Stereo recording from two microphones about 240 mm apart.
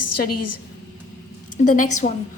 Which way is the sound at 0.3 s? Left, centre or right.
Left.